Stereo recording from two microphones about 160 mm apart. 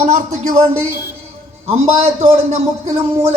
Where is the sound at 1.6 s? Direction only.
40° right (ahead or behind).